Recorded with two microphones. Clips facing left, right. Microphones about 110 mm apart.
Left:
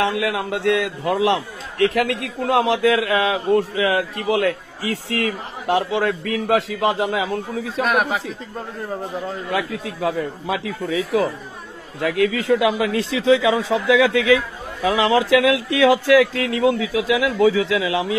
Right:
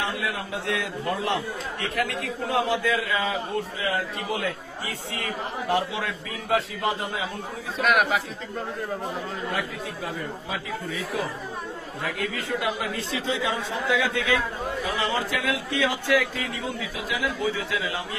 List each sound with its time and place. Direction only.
0.0 s a man's voice: 80° left
7.8 s speech: 35° left (ahead or behind)
9.5 s a man's voice: 90° left